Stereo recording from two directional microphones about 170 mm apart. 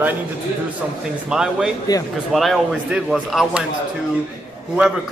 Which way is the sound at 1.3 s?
5° right (ahead or behind).